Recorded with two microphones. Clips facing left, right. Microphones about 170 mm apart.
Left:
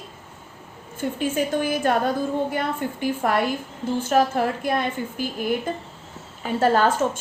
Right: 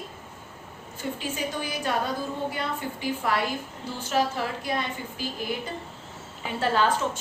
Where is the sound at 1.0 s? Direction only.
50° left (ahead or behind).